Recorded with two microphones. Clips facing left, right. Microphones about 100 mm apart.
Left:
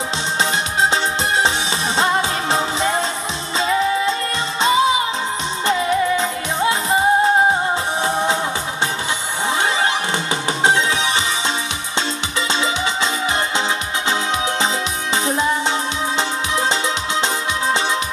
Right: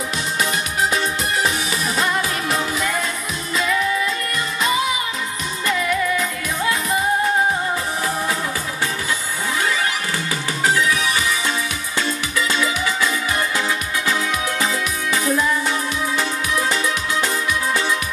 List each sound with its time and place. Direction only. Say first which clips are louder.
0.4 s music: left 3 dB; 25° left (ahead or behind)
10.6 s music: left 1 dB; 25° left (ahead or behind)
15.2 s music: even; 25° left (ahead or behind)